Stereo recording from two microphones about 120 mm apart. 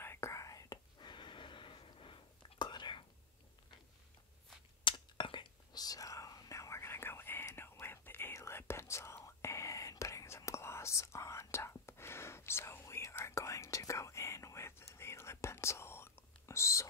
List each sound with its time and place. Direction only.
0.0 s whispering: 20° left (ahead or behind); by 3.1 s 40° left (ahead or behind)
4.8 s whispering: 40° left (ahead or behind); by 16.8 s 25° left (ahead or behind)